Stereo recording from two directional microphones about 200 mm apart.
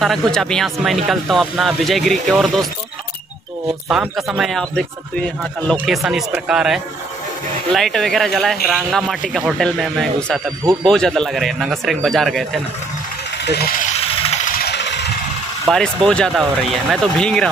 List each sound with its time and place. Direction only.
0.0 s speech: centre (ahead or behind)
3.9 s speech: 5° right (ahead or behind)
13.4 s speech: 55° left (ahead or behind)
13.9 s vehicle: 30° left (ahead or behind)
14.5 s engine: 55° left (ahead or behind)
15.7 s speech: 5° left (ahead or behind)